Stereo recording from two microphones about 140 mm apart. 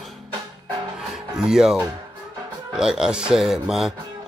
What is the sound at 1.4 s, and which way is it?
A man's voice, 5° right (ahead or behind).